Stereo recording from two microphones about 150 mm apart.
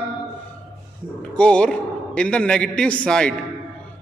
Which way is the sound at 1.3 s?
5° left (ahead or behind).